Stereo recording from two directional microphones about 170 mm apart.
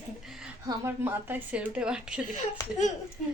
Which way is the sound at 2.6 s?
20° left (ahead or behind).